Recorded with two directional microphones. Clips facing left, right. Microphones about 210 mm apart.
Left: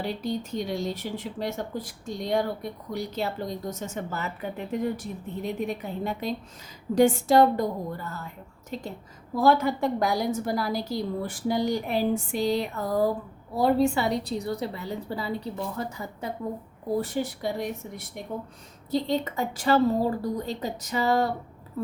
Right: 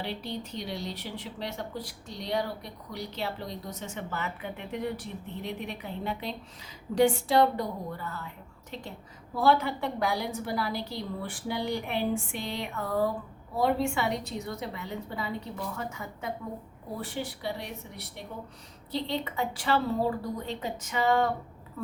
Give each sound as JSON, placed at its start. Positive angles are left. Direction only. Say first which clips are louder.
{"t": 0.0, "sound": "a woman's voice", "louder": "left 6 dB", "side_deg": 45}